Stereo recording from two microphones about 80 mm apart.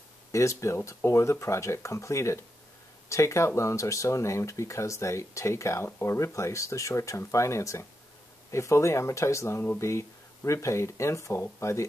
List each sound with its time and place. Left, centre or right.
0.3 s speech: left